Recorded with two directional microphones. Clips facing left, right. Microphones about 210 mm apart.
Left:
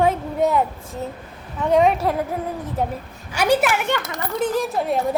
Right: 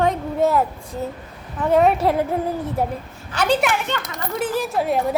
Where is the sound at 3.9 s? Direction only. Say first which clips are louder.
Left 2 dB; 15° left (ahead or behind).